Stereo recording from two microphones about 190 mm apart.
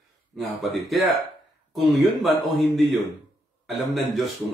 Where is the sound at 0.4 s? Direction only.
Centre (ahead or behind).